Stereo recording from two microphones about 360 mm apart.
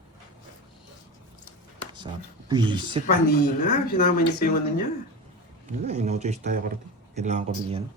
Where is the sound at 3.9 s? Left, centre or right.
Left.